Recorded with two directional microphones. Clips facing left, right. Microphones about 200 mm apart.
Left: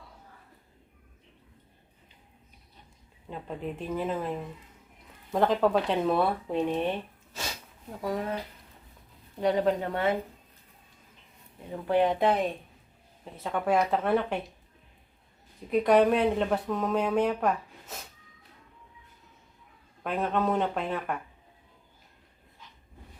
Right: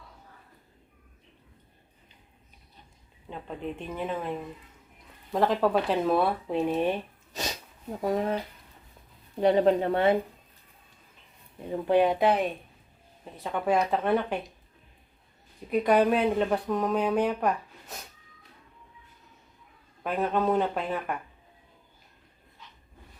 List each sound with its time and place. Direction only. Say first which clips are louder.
3.2 s speech: even; centre (ahead or behind); by 8.4 s 25° right (ahead or behind)
9.4 s speech: right 4 dB; 25° right (ahead or behind)
11.9 s speech: right 2 dB; 10° right (ahead or behind)
15.7 s speech: left 1 dB; centre (ahead or behind)
20.1 s speech: right 2 dB; centre (ahead or behind)